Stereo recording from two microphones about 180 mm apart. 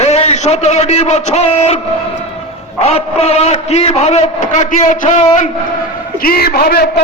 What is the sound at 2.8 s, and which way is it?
A man's voice, 35° left (ahead or behind).